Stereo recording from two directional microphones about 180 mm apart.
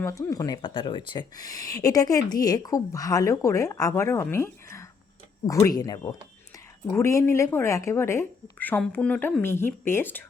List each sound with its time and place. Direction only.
0.0 s speech: 20° left (ahead or behind)